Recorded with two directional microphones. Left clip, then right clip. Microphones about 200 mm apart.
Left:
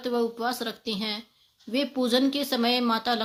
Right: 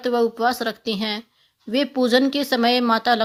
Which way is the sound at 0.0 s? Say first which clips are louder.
Right 8 dB; 40° right (ahead or behind).